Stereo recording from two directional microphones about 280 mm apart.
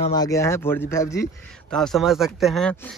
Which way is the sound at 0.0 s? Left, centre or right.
Centre.